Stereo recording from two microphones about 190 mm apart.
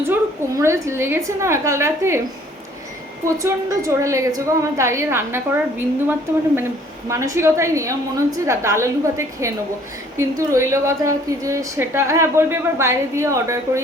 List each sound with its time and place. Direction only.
0.0 s a woman's voice: 15° right (ahead or behind)
3.3 s a woman's voice: 15° right (ahead or behind)
7.1 s a woman's voice: 15° right (ahead or behind)